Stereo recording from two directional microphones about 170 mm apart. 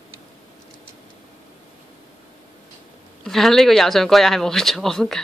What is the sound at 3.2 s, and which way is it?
Speech, centre (ahead or behind).